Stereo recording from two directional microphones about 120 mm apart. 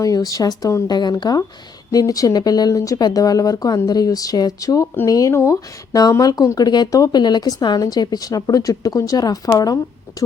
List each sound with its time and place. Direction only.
0.0 s speech: 30° left (ahead or behind)